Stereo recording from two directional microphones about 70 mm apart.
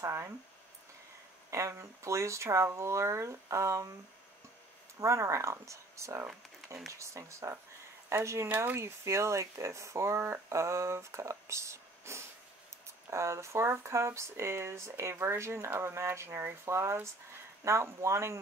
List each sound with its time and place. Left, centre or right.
0.0 s speech: right
1.5 s speech: right
5.0 s speech: right
8.5 s speech: right